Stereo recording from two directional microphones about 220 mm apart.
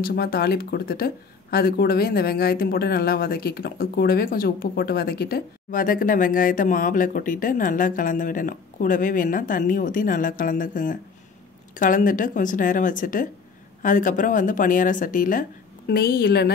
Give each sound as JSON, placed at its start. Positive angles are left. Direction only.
{"t": 0.0, "sound": "a woman's voice", "side_deg": 45}